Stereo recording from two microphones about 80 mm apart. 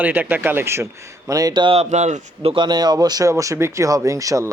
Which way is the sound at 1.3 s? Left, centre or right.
Right.